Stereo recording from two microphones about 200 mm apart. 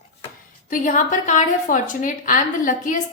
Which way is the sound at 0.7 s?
40° left (ahead or behind).